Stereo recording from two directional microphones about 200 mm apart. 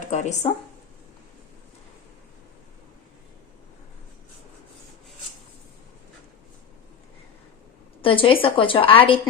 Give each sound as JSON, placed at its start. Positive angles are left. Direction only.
{"t": 0.1, "sound": "speech", "side_deg": 35}
{"t": 8.0, "sound": "a woman's voice", "side_deg": 25}